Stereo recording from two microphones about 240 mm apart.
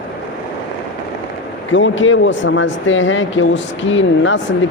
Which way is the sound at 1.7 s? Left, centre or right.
Left.